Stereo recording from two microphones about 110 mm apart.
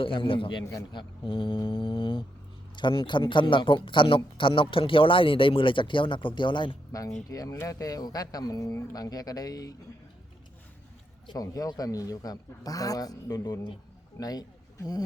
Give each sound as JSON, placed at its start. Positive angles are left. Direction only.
{"t": 0.0, "sound": "speech", "side_deg": 55}
{"t": 0.6, "sound": "a man's voice", "side_deg": 25}
{"t": 0.9, "sound": "speech", "side_deg": 45}
{"t": 1.6, "sound": "mantra", "side_deg": 50}
{"t": 2.7, "sound": "speech", "side_deg": 50}
{"t": 7.3, "sound": "speech", "side_deg": 30}
{"t": 11.3, "sound": "speech", "side_deg": 35}
{"t": 13.4, "sound": "speech", "side_deg": 45}